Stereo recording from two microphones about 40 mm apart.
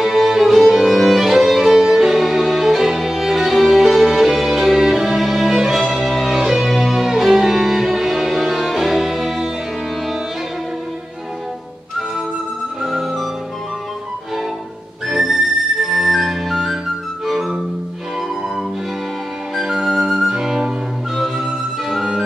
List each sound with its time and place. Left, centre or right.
0.0 s music: centre
12.8 s flute: centre
15.0 s music: centre
15.8 s flute: centre
17.3 s music: centre
19.5 s music: centre